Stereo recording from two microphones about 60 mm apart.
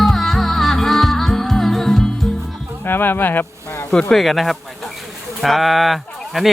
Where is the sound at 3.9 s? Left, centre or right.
Centre.